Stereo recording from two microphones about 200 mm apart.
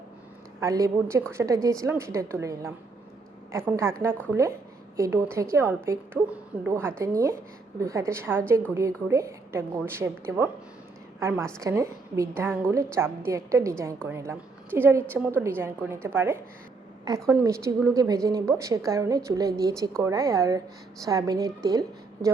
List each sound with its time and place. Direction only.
0.6 s a woman's voice: 15° right (ahead or behind)